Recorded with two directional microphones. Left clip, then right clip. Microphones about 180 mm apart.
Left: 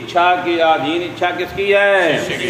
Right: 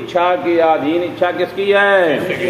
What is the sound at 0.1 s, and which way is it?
A man's voice, 10° right (ahead or behind).